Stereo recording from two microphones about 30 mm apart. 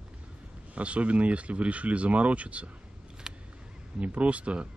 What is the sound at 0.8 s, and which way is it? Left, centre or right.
Speech, right.